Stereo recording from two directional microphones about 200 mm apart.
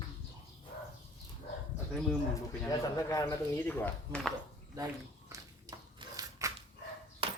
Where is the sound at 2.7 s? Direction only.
15° left (ahead or behind).